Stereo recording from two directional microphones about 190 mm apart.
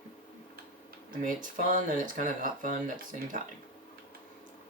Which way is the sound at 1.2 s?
45° right (ahead or behind).